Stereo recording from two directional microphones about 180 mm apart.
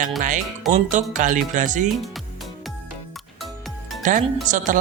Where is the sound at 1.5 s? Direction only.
45° right (ahead or behind).